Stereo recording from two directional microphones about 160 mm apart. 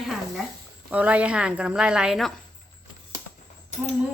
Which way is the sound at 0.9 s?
10° right (ahead or behind).